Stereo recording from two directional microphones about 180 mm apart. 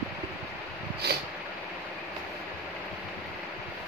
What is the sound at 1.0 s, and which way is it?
Vehicle, 65° right (ahead or behind).